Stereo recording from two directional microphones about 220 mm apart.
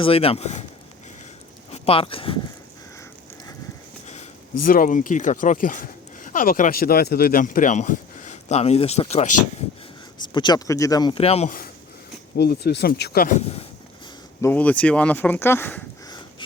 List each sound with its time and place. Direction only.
0.0 s speech: 25° left (ahead or behind)
1.7 s speech: 25° left (ahead or behind)
4.6 s speech: 40° left (ahead or behind)
12.4 s speech: 45° left (ahead or behind); by 13.7 s 30° left (ahead or behind)
14.4 s speech: 5° left (ahead or behind)